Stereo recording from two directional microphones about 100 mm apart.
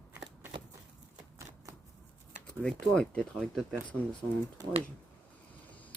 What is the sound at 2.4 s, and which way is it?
Speech, 10° left (ahead or behind).